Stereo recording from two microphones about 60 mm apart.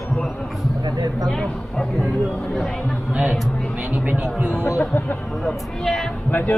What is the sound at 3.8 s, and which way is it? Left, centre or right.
Speech, right.